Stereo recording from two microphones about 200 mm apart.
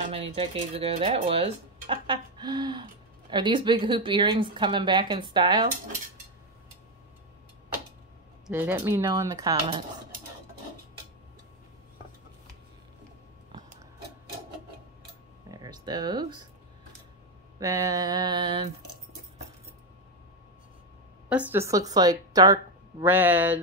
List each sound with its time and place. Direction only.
0.1 s speech: 25° right (ahead or behind)
8.5 s a woman's voice: 10° right (ahead or behind)
15.5 s a sound: 20° right (ahead or behind)
17.6 s speech: 15° right (ahead or behind)
21.3 s a woman's voice: 10° right (ahead or behind)